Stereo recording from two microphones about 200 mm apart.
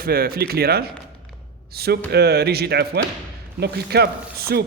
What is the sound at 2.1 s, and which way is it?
Speech, 55° right (ahead or behind).